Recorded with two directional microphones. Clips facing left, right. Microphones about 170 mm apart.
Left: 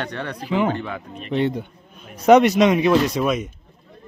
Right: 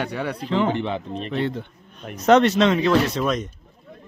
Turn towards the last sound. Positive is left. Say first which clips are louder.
# left 2 dB
turn(degrees=10)  # may be behind; listen again after turning